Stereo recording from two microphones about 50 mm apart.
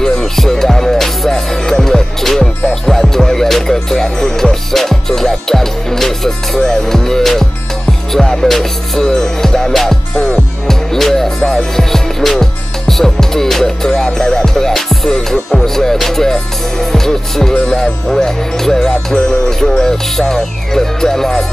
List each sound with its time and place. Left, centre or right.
0.0 s music: centre
10.1 s music: left
10.7 s music: centre